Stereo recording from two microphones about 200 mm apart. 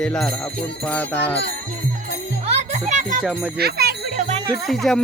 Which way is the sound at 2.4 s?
35° right (ahead or behind).